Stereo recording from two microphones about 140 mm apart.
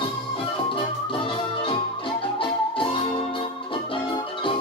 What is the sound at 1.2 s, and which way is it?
Music, 40° left (ahead or behind).